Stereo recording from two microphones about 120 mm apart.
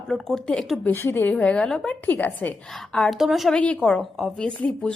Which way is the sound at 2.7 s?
Centre (ahead or behind).